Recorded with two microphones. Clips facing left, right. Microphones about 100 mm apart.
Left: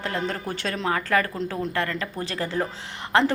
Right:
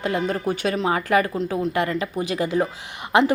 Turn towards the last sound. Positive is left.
turn(degrees=-15)  # may be behind; listen again after turning